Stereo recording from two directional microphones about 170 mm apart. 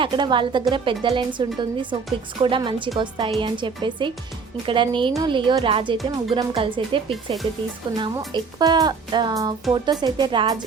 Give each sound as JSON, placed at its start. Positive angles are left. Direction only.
{"t": 0.0, "sound": "a woman's voice", "side_deg": -25}